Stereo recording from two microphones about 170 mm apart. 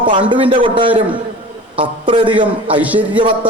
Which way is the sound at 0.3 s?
30° right (ahead or behind).